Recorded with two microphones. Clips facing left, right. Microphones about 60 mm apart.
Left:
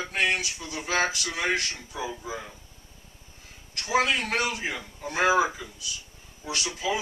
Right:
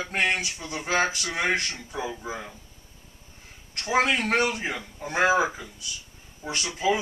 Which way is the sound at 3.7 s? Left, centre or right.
Right.